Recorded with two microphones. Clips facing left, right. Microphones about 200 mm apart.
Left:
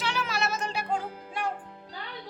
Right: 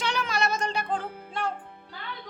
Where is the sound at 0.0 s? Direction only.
5° left (ahead or behind).